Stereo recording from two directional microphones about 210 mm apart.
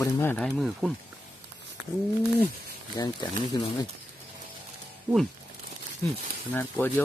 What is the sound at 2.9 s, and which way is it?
Speech, 20° left (ahead or behind).